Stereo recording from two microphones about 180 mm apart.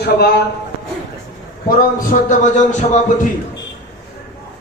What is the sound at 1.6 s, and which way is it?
A man's voice, 50° left (ahead or behind).